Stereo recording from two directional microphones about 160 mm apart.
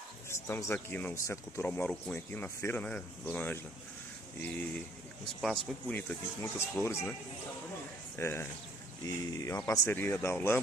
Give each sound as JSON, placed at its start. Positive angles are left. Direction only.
{"t": 0.3, "sound": "speech", "side_deg": 15}
{"t": 8.2, "sound": "speech", "side_deg": 15}